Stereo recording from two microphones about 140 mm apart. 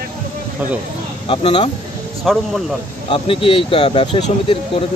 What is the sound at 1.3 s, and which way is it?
Speech, 40° left (ahead or behind).